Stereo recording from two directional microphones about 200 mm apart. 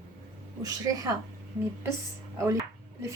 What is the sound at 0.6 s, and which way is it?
Speech, 20° right (ahead or behind).